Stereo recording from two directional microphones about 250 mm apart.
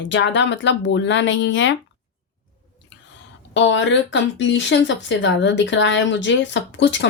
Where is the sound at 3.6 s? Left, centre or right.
Left.